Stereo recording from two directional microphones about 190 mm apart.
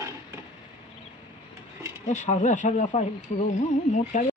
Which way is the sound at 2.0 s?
40° left (ahead or behind).